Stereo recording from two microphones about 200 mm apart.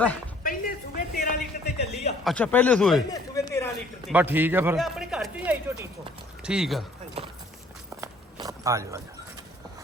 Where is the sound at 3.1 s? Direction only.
15° left (ahead or behind).